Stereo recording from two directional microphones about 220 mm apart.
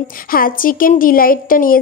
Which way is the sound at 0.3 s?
40° left (ahead or behind).